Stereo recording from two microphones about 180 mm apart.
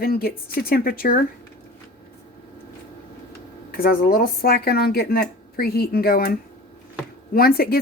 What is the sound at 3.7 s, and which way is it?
Speech, 55° left (ahead or behind).